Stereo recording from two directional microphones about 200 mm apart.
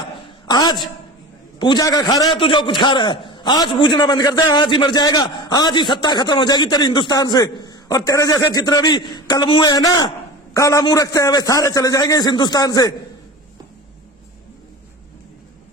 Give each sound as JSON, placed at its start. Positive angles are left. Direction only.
{"t": 0.4, "sound": "a woman's voice", "side_deg": 20}